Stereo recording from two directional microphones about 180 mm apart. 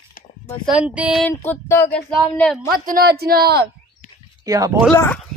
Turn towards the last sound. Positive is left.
turn(degrees=5)  # may be behind; listen again after turning